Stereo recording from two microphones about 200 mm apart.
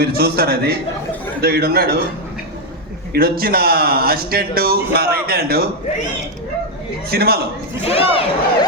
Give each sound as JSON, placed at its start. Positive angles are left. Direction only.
{"t": 0.0, "sound": "a man's voice", "side_deg": -50}
{"t": 3.1, "sound": "a man's voice", "side_deg": -50}
{"t": 7.1, "sound": "a man's voice", "side_deg": -50}
{"t": 7.9, "sound": "speech", "side_deg": 30}